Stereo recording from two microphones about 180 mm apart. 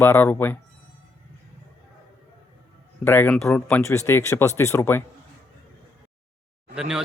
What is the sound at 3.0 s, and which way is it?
Speech, 10° left (ahead or behind).